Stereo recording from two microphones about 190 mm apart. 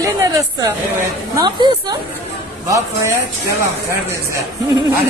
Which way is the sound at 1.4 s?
20° right (ahead or behind).